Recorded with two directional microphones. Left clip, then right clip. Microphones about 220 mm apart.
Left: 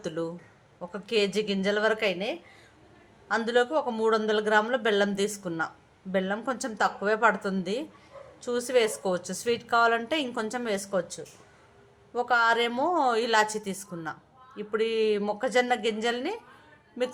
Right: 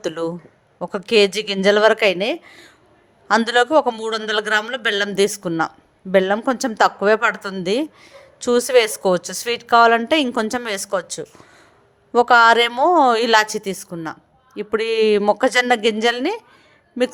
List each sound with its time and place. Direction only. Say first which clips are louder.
0.0 s a woman's voice: right 9 dB; 35° right (ahead or behind)